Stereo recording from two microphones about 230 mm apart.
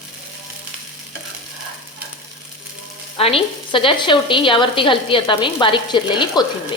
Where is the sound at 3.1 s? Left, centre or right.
Left.